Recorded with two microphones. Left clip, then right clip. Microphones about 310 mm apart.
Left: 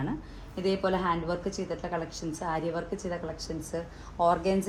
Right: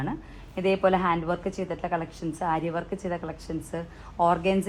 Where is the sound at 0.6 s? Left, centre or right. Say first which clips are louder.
Right 5 dB; right.